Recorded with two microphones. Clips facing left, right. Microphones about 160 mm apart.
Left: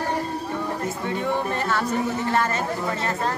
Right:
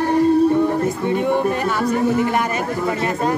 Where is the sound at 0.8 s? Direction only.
15° right (ahead or behind).